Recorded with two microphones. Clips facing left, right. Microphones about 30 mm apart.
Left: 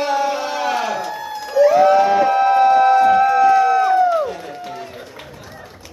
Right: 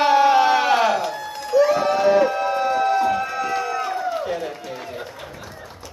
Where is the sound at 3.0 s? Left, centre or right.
Centre.